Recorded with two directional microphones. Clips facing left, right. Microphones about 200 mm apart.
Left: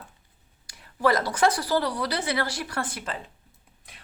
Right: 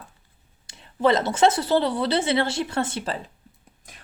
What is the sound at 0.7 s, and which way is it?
Speech, 25° right (ahead or behind).